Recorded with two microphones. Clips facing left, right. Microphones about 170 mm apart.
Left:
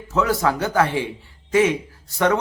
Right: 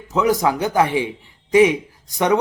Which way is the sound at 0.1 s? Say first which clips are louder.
Right 2 dB; 15° right (ahead or behind).